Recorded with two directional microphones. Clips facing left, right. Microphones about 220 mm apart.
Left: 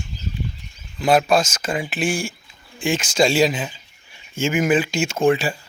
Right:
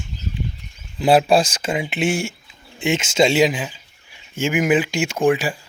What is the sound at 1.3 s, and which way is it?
Speech, 30° right (ahead or behind).